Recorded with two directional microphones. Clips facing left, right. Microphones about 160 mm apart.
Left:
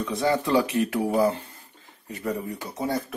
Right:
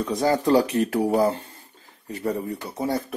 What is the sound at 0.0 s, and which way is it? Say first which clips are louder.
Speech: right 3 dB; 40° right (ahead or behind).